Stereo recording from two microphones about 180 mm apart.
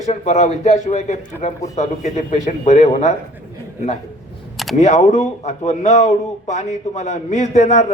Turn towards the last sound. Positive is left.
turn(degrees=40)  # may be behind; listen again after turning